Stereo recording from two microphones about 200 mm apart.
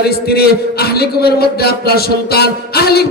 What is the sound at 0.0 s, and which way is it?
A man's voice, 50° left (ahead or behind).